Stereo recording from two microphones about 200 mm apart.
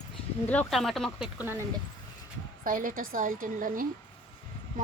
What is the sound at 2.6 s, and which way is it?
A woman's voice, 45° right (ahead or behind).